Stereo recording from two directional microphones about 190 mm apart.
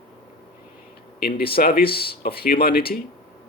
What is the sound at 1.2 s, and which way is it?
Speech, 55° left (ahead or behind).